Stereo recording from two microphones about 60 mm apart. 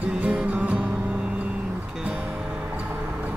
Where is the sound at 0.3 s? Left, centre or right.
Centre.